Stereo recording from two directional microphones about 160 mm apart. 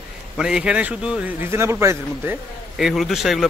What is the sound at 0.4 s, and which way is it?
Speech, 5° right (ahead or behind).